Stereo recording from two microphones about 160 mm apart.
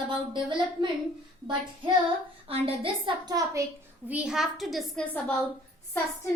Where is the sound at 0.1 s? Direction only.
30° right (ahead or behind).